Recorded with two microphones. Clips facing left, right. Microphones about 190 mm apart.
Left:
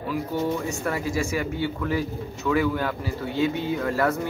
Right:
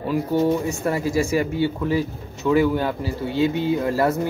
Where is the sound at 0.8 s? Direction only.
30° right (ahead or behind).